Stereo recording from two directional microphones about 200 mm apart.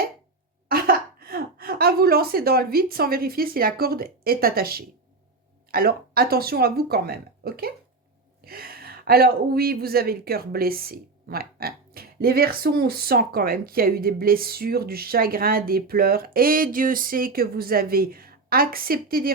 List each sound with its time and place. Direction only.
0.7 s speech: 50° right (ahead or behind)